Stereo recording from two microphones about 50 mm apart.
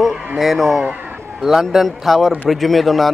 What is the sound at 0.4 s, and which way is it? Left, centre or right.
A man's voice, centre.